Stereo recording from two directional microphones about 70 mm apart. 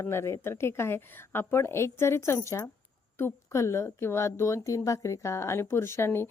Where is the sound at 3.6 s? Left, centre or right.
Left.